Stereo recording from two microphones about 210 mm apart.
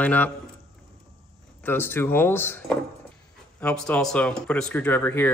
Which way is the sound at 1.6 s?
10° left (ahead or behind).